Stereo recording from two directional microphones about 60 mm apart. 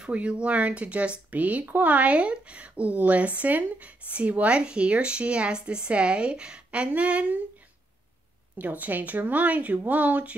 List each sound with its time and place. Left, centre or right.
0.0 s speech: centre
8.5 s speech: right